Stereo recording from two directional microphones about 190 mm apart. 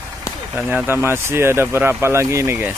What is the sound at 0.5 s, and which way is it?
Speech, 10° right (ahead or behind).